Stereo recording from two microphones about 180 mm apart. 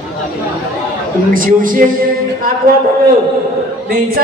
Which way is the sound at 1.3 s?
50° right (ahead or behind).